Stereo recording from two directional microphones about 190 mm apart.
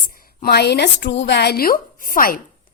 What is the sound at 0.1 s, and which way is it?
A woman's voice, 50° left (ahead or behind).